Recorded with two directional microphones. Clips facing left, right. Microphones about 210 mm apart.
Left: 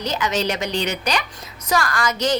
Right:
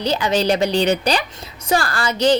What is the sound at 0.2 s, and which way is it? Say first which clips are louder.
A woman's voice: right 5 dB; 35° right (ahead or behind).